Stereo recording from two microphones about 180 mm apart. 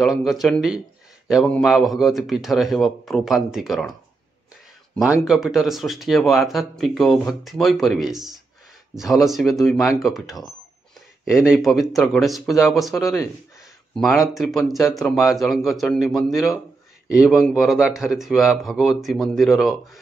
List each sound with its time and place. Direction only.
0.2 s speech: centre (ahead or behind)
4.9 s speech: 5° right (ahead or behind)
14.2 s speech: centre (ahead or behind)